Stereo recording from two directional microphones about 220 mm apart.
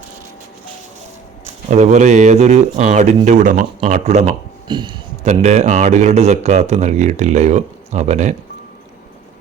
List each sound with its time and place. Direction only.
1.5 s speech: 30° right (ahead or behind)
4.7 s speech: 20° right (ahead or behind)
5.2 s speech: 30° right (ahead or behind)